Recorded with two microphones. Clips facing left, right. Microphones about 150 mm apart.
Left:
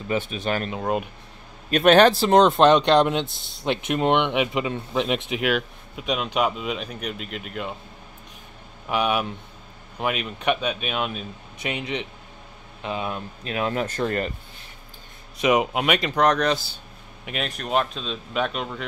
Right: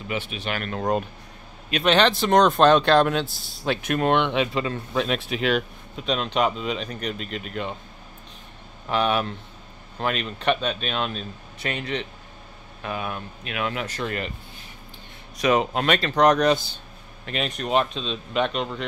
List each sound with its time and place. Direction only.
0.1 s speech: 45° left (ahead or behind)
0.7 s speech: 5° left (ahead or behind)
1.7 s speech: 45° left (ahead or behind); by 7.7 s centre (ahead or behind)
8.8 s speech: 10° left (ahead or behind); by 13.8 s 35° left (ahead or behind)
13.8 s speech: 45° left (ahead or behind)
15.3 s speech: 15° left (ahead or behind)
16.2 s speech: centre (ahead or behind)